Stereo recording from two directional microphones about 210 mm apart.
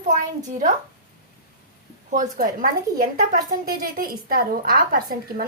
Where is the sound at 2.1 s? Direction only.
40° right (ahead or behind).